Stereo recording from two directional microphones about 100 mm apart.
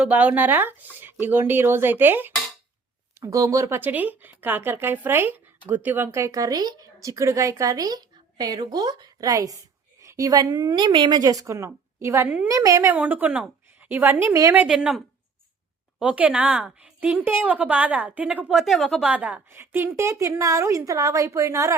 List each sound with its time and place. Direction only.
0.0 s speech: 15° right (ahead or behind)
3.2 s speech: 30° right (ahead or behind)
3.8 s speech: 20° right (ahead or behind); by 11.2 s 50° right (ahead or behind)
11.2 s speech: 35° right (ahead or behind)
12.9 s a woman's voice: 15° right (ahead or behind)
18.4 s speech: centre (ahead or behind)
19.0 s a woman's voice: 10° right (ahead or behind)
19.5 s speech: 25° right (ahead or behind)